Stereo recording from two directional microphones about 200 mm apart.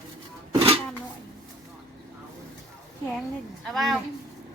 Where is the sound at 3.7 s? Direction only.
Centre (ahead or behind).